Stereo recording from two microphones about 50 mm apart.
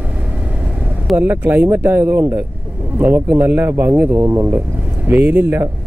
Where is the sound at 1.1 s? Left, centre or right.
Right.